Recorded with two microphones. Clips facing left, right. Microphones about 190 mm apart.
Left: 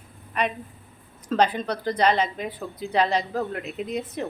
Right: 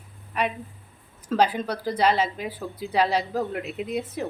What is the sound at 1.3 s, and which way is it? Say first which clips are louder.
A woman's voice: even; 5° right (ahead or behind).